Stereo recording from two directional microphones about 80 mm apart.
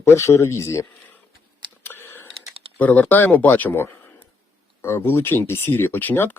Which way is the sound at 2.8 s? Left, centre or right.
Left.